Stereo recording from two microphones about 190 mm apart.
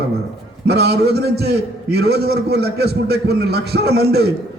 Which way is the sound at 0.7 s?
55° right (ahead or behind).